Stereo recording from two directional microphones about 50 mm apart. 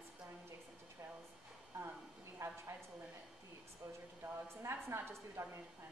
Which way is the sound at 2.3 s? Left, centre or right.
Right.